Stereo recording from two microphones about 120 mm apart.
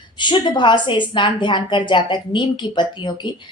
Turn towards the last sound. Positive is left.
turn(degrees=40)  # may be behind; listen again after turning